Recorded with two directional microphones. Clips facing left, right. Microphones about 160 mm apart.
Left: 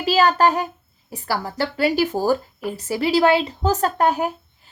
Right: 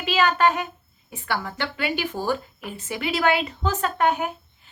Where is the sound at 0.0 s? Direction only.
35° left (ahead or behind).